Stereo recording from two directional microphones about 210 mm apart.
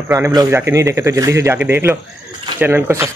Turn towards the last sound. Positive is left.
turn(degrees=-10)  # may be behind; listen again after turning